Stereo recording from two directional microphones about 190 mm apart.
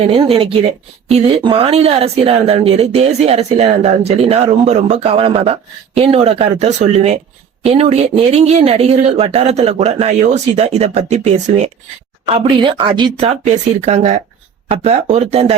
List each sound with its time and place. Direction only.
0.0 s speech: 30° right (ahead or behind)